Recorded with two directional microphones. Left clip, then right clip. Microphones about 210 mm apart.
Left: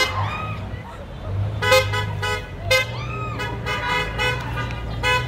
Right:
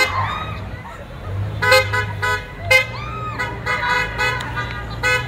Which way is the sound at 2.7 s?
10° right (ahead or behind).